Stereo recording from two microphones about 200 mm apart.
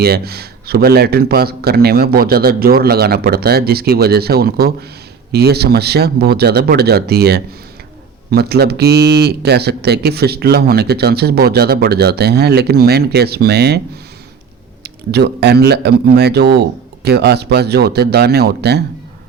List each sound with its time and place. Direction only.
0.0 s speech: 50° right (ahead or behind)
14.8 s speech: 55° right (ahead or behind)